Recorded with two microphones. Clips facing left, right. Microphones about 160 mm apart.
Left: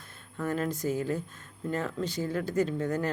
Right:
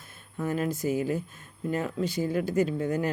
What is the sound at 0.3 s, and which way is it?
Speech, 10° right (ahead or behind).